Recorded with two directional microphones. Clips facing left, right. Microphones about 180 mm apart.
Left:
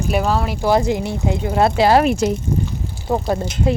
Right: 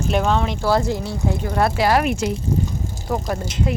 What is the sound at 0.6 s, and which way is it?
Speech, 15° left (ahead or behind).